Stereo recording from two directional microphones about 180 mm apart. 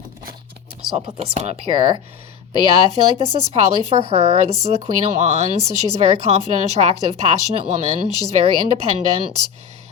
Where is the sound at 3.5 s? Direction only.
35° right (ahead or behind).